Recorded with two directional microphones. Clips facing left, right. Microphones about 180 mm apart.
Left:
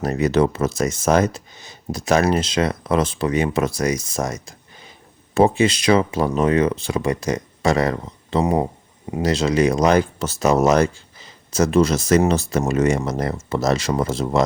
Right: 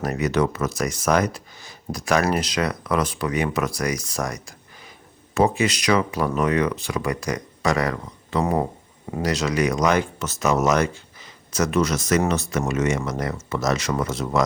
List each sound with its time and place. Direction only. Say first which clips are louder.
0.0 s speech: left 4 dB; 30° left (ahead or behind)